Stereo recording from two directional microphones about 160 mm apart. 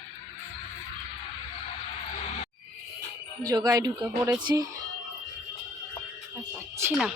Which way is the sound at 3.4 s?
25° right (ahead or behind).